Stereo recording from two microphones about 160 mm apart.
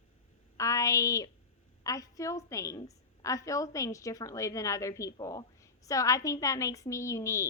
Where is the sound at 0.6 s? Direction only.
20° left (ahead or behind).